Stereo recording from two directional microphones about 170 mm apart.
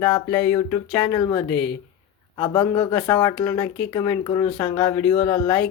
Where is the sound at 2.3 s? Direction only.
25° left (ahead or behind).